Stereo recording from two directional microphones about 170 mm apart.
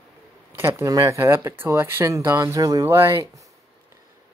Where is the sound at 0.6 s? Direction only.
20° right (ahead or behind).